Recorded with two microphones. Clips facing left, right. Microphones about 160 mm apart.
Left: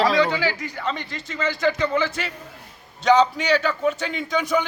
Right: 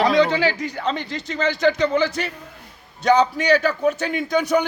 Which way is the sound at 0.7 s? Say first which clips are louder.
Right 3 dB; 35° right (ahead or behind).